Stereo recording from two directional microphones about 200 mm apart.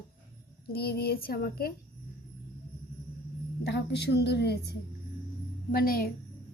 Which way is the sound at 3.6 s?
55° left (ahead or behind).